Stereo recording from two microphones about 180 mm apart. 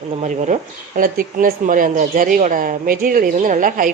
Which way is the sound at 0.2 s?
40° right (ahead or behind).